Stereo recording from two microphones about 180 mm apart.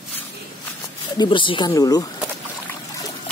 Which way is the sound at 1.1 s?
25° left (ahead or behind).